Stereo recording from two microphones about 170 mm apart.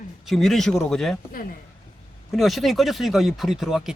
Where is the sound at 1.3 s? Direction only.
55° left (ahead or behind).